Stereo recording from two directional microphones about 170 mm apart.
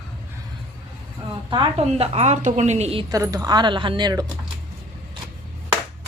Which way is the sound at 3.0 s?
20° right (ahead or behind).